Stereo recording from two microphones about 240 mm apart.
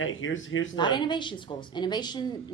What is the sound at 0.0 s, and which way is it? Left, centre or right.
Speech, left.